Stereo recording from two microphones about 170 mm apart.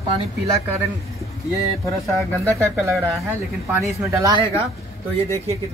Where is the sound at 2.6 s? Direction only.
15° right (ahead or behind).